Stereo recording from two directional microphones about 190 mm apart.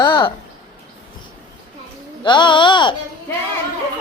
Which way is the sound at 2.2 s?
25° left (ahead or behind).